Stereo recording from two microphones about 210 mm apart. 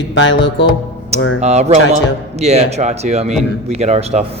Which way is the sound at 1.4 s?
30° right (ahead or behind).